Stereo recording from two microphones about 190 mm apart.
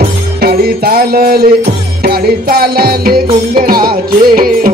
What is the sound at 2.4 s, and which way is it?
Music, 50° right (ahead or behind).